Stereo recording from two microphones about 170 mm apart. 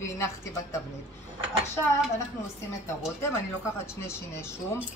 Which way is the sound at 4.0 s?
15° left (ahead or behind).